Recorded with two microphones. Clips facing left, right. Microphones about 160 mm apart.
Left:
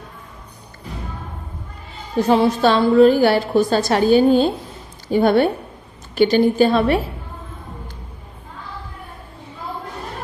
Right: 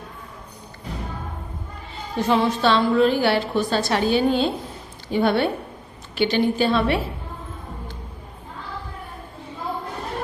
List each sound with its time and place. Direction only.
2.2 s a woman's voice: 40° left (ahead or behind)